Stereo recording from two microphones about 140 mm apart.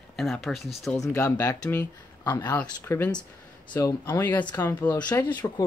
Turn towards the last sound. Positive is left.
turn(degrees=15)  # may be behind; listen again after turning